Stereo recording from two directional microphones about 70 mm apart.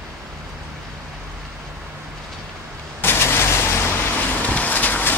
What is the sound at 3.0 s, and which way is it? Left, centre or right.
Vehicle, left.